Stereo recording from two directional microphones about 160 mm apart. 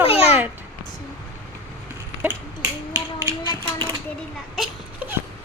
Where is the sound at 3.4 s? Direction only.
25° left (ahead or behind).